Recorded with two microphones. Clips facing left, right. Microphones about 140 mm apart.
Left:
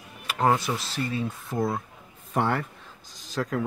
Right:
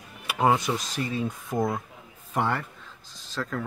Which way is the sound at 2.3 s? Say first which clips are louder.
Left 1 dB; 5° left (ahead or behind).